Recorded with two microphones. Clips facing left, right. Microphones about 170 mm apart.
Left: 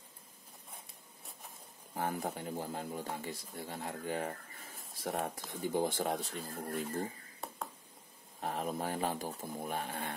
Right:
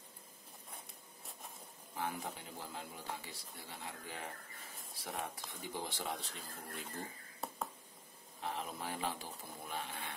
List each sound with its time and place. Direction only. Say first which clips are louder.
2.0 s speech: left 5 dB; 45° left (ahead or behind)
7.4 s a sound: right 1 dB; centre (ahead or behind)
8.4 s speech: left 6 dB; 45° left (ahead or behind)